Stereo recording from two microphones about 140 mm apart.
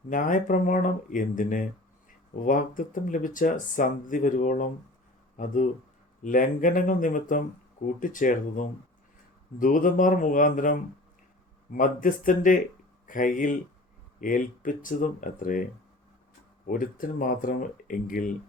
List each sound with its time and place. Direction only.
0.1 s speech: 75° left (ahead or behind)
6.2 s speech: 70° left (ahead or behind)
16.6 s speech: 80° left